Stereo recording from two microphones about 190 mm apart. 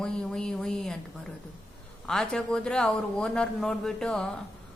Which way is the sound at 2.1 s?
5° left (ahead or behind).